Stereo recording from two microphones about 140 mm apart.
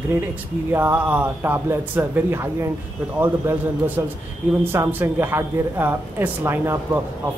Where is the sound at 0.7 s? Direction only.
15° right (ahead or behind).